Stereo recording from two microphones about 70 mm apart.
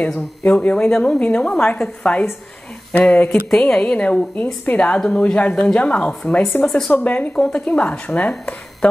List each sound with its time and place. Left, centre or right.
0.4 s a woman's voice: centre
6.9 s a woman's voice: left